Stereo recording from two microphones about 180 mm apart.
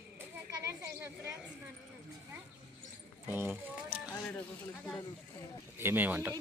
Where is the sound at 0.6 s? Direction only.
15° right (ahead or behind).